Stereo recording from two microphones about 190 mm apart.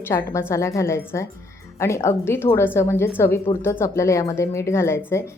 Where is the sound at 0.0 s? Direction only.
15° left (ahead or behind).